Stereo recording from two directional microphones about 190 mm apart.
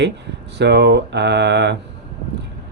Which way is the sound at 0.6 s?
65° right (ahead or behind).